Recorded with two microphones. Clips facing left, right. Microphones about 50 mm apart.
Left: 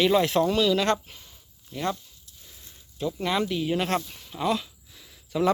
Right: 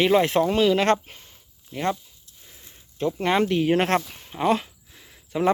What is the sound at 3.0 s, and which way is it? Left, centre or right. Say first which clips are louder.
Speech: right 5 dB; right.